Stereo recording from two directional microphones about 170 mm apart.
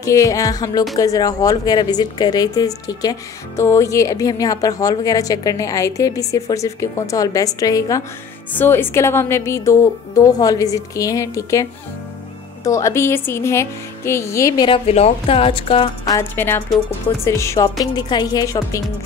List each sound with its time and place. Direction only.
0.0 s a woman's voice: 20° left (ahead or behind)
12.6 s a woman's voice: 15° left (ahead or behind)
14.7 s a woman's voice: 35° left (ahead or behind)
16.2 s a woman's voice: 15° left (ahead or behind)